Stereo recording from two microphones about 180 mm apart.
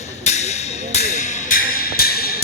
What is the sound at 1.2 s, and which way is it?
Music, 40° left (ahead or behind).